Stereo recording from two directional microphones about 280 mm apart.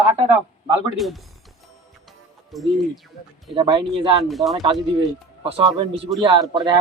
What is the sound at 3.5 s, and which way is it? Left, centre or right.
Speech, centre.